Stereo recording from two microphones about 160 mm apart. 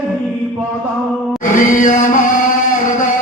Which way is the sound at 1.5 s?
50° left (ahead or behind).